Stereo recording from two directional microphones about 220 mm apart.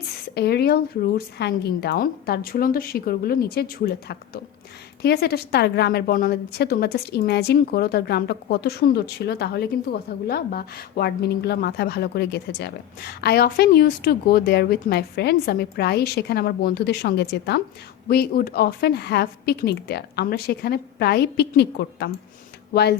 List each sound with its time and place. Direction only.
0.3 s speech: 45° left (ahead or behind)